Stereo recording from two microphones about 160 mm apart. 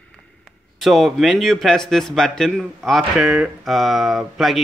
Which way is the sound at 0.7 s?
Centre (ahead or behind).